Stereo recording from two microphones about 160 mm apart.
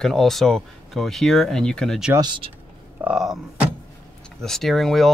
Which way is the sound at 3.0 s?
5° right (ahead or behind).